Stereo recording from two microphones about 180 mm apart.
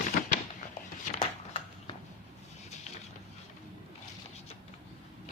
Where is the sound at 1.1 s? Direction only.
40° left (ahead or behind).